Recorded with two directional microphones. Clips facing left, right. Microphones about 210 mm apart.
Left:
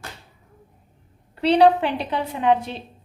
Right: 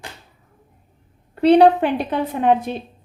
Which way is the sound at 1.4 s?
50° right (ahead or behind).